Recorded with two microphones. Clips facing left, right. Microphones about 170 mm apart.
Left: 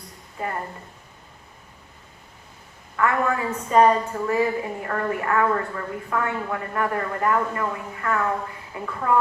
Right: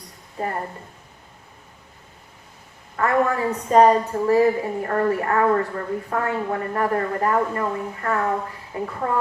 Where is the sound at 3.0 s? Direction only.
40° right (ahead or behind).